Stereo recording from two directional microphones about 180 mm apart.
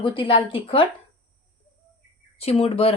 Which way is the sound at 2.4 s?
35° left (ahead or behind).